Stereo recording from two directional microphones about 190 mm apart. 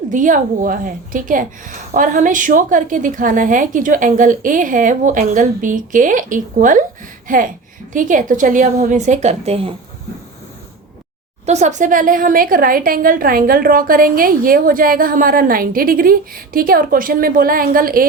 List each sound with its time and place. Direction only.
0.1 s a woman's voice: 45° right (ahead or behind)
11.4 s a woman's voice: 35° right (ahead or behind)